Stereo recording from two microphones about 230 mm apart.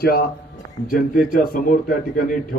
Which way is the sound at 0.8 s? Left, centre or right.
Left.